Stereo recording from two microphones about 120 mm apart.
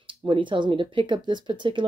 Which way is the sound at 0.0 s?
45° right (ahead or behind).